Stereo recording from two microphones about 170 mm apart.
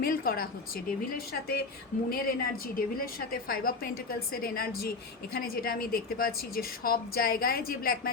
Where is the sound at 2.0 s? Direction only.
60° left (ahead or behind).